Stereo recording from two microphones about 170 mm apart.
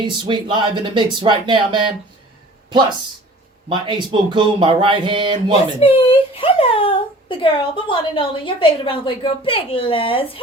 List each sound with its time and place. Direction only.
0.2 s speech: 30° right (ahead or behind)
3.7 s speech: 30° right (ahead or behind)
5.8 s speech: 35° left (ahead or behind)